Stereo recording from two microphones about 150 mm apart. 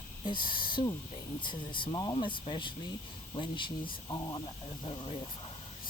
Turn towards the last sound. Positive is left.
turn(degrees=35)  # may be behind; listen again after turning